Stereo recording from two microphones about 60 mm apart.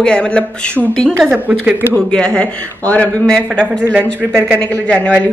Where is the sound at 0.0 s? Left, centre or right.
Centre.